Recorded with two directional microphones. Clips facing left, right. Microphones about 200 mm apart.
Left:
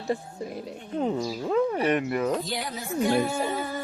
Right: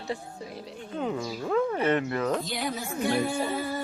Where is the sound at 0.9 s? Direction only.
30° left (ahead or behind).